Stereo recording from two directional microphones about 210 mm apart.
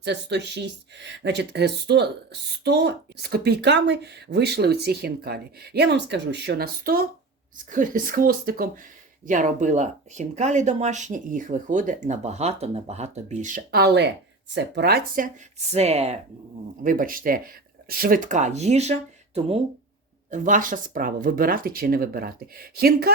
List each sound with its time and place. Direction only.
0.0 s speech: 55° right (ahead or behind); by 16.2 s 30° right (ahead or behind)
16.8 s speech: 40° right (ahead or behind)